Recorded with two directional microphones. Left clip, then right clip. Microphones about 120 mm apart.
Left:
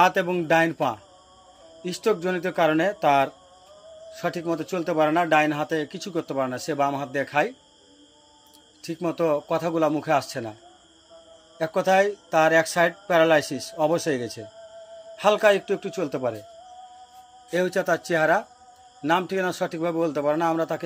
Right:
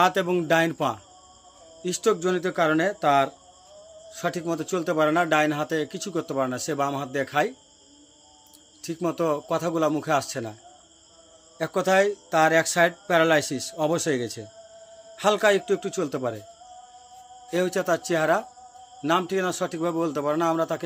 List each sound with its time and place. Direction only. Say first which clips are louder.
0.0 s a man's voice: left 1 dB; 30° right (ahead or behind)
8.8 s a man's voice: left 1 dB; 30° right (ahead or behind)
11.5 s speech: left 1 dB; 35° right (ahead or behind)
17.5 s a man's voice: left 1 dB; 25° right (ahead or behind)